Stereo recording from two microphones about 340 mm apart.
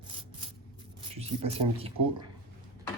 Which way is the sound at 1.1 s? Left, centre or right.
Centre.